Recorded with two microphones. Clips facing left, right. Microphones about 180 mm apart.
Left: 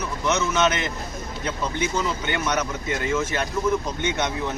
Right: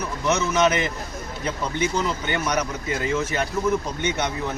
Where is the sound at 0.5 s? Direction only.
10° right (ahead or behind).